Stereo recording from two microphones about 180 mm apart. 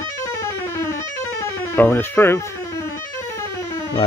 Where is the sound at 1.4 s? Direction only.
15° left (ahead or behind).